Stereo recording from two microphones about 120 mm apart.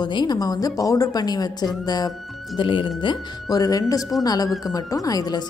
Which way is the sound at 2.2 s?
Centre (ahead or behind).